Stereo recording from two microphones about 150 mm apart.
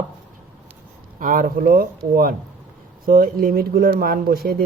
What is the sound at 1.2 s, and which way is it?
Speech, 70° right (ahead or behind).